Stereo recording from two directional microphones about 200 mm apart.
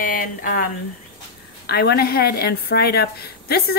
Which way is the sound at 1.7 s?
55° left (ahead or behind).